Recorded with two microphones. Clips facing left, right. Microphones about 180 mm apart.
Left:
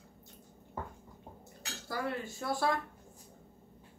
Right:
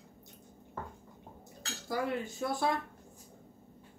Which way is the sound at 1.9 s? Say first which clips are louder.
Right 3 dB; 20° right (ahead or behind).